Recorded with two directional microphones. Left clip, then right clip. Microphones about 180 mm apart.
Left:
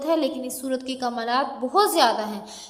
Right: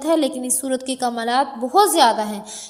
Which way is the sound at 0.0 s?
25° right (ahead or behind).